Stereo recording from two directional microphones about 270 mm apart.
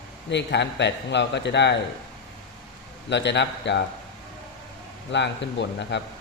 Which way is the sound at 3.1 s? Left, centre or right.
Left.